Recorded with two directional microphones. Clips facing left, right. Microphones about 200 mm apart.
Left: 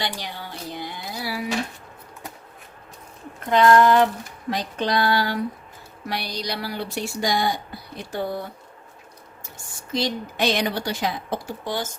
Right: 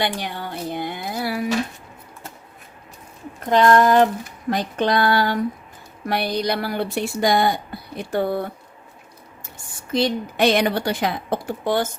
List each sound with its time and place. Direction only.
0.0 s speech: 55° right (ahead or behind)
3.5 s a sound: 40° right (ahead or behind)
6.1 s speech: 55° right (ahead or behind)
9.9 s speech: 55° right (ahead or behind)